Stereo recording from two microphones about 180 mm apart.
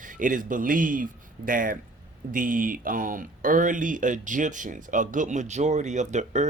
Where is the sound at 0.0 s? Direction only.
45° right (ahead or behind).